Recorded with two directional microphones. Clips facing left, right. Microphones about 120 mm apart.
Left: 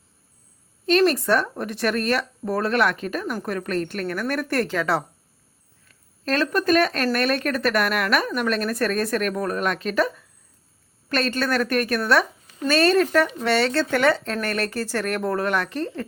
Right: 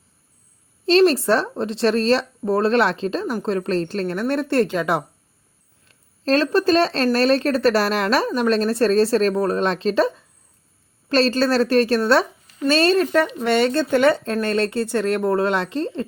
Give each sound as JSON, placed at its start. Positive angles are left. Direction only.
{"t": 0.9, "sound": "speech", "side_deg": -30}
{"t": 5.9, "sound": "speech", "side_deg": -30}